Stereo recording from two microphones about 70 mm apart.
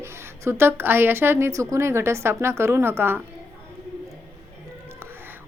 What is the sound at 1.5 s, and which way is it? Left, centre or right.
A woman's voice, right.